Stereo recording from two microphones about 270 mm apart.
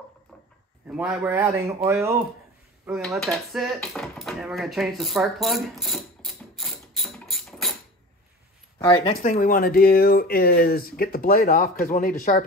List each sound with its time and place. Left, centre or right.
0.8 s a man's voice: centre
3.3 s drawer open or close: centre
8.7 s speech: centre
9.2 s speech: left